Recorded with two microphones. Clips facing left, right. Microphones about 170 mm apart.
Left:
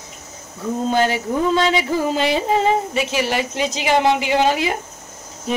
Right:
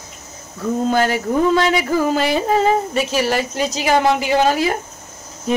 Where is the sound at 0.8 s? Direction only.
20° left (ahead or behind).